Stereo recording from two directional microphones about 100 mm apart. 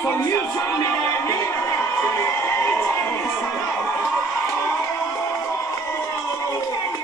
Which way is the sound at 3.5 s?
30° left (ahead or behind).